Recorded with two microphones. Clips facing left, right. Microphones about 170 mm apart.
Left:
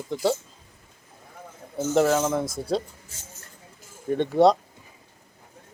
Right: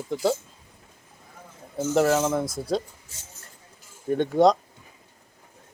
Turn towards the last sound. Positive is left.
turn(degrees=0)  # may be behind; listen again after turning